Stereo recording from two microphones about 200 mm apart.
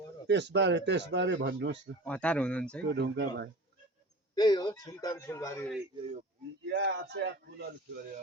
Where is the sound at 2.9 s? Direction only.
60° right (ahead or behind).